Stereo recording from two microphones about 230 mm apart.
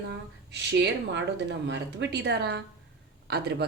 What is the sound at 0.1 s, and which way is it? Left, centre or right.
Speech, right.